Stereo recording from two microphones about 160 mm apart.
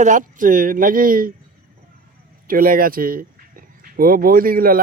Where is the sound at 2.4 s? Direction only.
65° right (ahead or behind).